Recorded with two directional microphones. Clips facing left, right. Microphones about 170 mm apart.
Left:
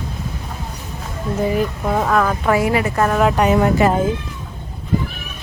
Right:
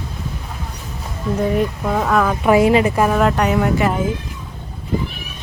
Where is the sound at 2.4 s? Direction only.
20° right (ahead or behind).